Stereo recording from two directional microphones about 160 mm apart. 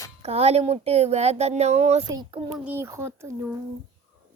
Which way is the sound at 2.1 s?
25° right (ahead or behind).